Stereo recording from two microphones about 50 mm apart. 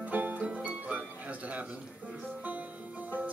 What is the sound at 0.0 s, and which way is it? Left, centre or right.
Music, right.